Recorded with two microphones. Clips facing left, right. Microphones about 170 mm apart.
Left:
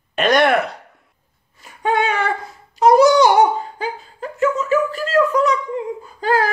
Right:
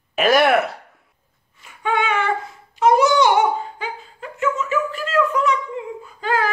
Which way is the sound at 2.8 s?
35° left (ahead or behind).